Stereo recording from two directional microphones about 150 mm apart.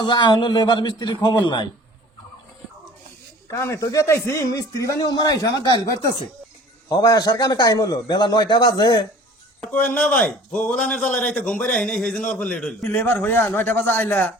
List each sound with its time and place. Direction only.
0.0 s a man's voice: 30° left (ahead or behind)
3.6 s a man's voice: 20° left (ahead or behind)
6.8 s a man's voice: 25° left (ahead or behind)
9.6 s a man's voice: 10° left (ahead or behind)